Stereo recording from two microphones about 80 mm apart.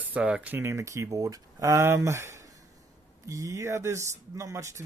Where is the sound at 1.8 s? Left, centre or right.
Right.